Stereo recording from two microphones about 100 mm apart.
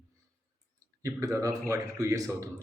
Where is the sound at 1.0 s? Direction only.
35° right (ahead or behind).